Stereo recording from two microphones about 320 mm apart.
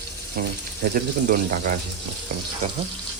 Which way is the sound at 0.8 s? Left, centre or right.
Right.